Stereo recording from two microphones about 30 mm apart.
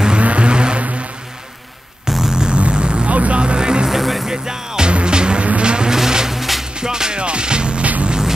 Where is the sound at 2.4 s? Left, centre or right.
Right.